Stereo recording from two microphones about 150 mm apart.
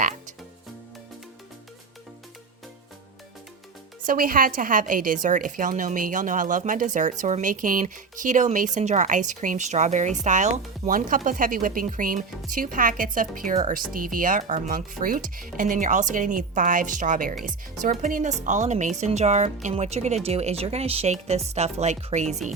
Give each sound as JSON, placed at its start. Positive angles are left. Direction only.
{"t": 4.0, "sound": "a woman's voice", "side_deg": -70}